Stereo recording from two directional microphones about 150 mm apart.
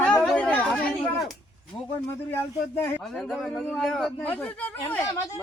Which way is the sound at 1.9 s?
15° left (ahead or behind).